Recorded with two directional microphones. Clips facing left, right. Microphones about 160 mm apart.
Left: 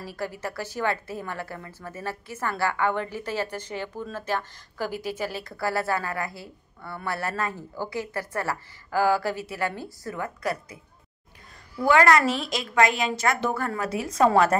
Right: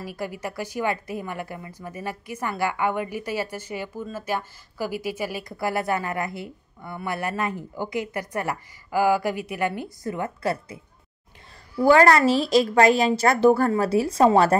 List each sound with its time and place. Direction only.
0.0 s speech: 15° right (ahead or behind)
11.8 s a woman's voice: 35° right (ahead or behind)